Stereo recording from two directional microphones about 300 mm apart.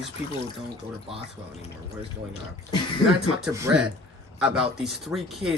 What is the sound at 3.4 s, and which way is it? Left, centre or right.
A man's voice, centre.